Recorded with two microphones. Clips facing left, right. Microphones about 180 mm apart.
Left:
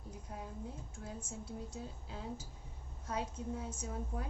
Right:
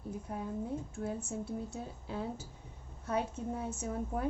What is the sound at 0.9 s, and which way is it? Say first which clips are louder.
Speech: right 9 dB; 65° right (ahead or behind).